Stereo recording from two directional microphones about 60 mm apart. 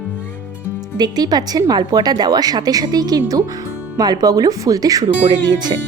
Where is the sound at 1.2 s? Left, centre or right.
Right.